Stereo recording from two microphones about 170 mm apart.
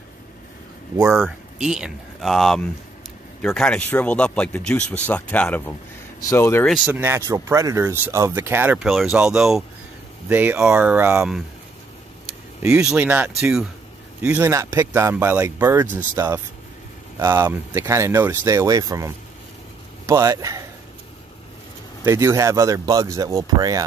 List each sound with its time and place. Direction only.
1.1 s speech: centre (ahead or behind); by 6.7 s 15° left (ahead or behind)
6.9 s speech: 15° right (ahead or behind)
12.6 s speech: 5° right (ahead or behind)
22.0 s speech: 15° right (ahead or behind)